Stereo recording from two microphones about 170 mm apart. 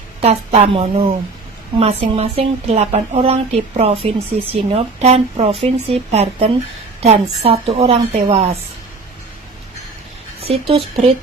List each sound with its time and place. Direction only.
0.2 s a woman's voice: 40° right (ahead or behind)
10.4 s a woman's voice: 35° right (ahead or behind)